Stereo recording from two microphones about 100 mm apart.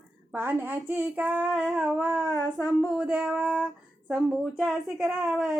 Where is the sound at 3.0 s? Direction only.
10° right (ahead or behind).